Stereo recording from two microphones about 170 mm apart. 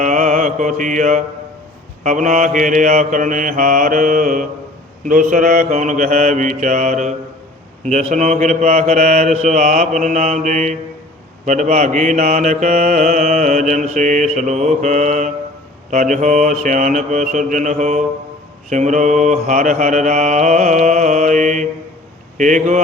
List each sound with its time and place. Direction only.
0.0 s mantra: 45° right (ahead or behind)